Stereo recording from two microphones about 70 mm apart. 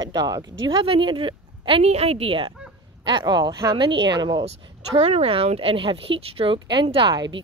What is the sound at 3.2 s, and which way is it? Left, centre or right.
Speech, right.